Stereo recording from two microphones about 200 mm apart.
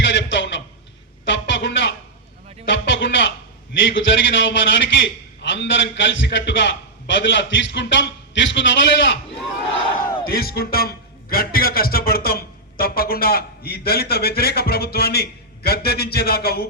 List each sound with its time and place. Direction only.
0.1 s a sound: 65° left (ahead or behind)
3.8 s a man's voice: 65° left (ahead or behind)
10.3 s a man's voice: 50° left (ahead or behind)